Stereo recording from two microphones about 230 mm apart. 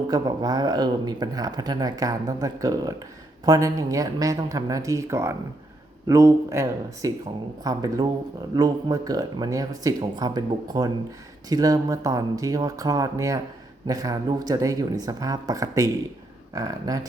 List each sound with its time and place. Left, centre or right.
0.1 s speech: centre